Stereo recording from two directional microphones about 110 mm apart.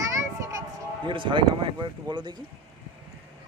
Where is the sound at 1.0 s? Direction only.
50° right (ahead or behind).